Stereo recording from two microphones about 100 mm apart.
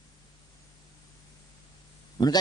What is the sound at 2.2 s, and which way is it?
Speech, 45° left (ahead or behind).